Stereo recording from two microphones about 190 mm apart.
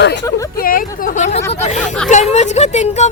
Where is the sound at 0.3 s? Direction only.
15° left (ahead or behind).